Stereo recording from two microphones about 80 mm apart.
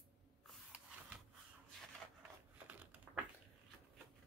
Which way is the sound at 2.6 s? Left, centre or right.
Centre.